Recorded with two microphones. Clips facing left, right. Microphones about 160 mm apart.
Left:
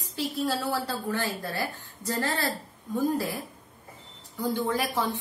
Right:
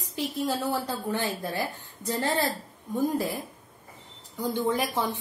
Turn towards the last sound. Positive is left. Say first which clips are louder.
# right 1 dB
turn(degrees=-15)  # may be behind; listen again after turning